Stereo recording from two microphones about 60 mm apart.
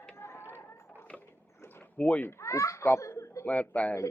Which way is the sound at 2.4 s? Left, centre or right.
Left.